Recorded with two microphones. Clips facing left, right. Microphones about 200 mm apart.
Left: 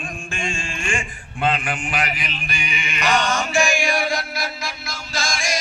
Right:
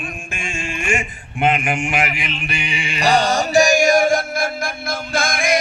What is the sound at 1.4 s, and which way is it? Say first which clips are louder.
Speech: right 4 dB; 25° right (ahead or behind).